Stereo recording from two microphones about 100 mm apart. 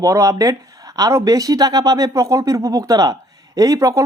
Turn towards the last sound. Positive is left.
turn(degrees=-35)  # may be behind; listen again after turning